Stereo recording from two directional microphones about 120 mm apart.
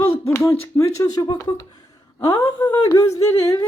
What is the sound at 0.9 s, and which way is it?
Speech, 30° left (ahead or behind).